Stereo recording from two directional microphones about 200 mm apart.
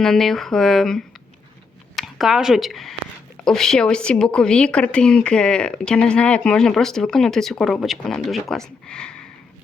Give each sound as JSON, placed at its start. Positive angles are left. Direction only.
{"t": 0.0, "sound": "a woman's voice", "side_deg": 0}